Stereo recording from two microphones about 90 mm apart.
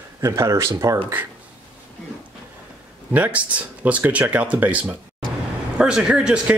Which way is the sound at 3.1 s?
15° right (ahead or behind).